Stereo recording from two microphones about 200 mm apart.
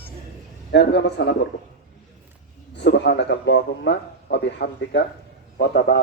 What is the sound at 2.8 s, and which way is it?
A man's voice, 60° left (ahead or behind).